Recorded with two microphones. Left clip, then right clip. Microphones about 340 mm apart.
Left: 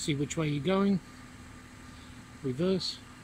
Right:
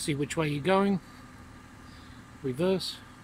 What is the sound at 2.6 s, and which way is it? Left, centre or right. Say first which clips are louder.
Speech: right 2 dB; right.